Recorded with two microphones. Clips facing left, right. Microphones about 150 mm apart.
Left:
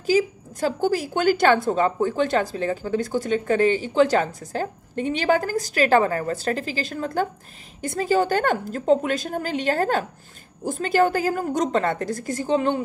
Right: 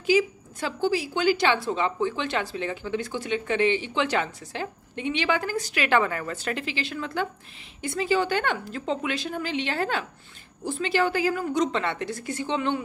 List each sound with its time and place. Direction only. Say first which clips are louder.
0.0 s a woman's voice: left 2 dB; 40° left (ahead or behind)